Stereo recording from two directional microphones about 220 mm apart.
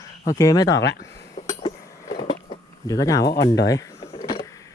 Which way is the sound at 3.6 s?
15° left (ahead or behind).